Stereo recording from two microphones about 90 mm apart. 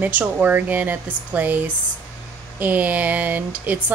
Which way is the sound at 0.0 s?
20° right (ahead or behind).